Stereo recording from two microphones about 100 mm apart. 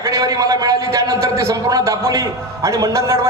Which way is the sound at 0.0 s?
35° right (ahead or behind).